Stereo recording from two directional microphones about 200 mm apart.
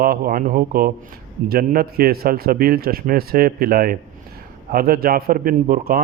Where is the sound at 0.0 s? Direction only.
45° right (ahead or behind).